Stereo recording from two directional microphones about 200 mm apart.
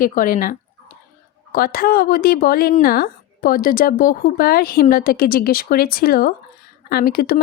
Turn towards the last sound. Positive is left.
turn(degrees=50)  # may be behind; listen again after turning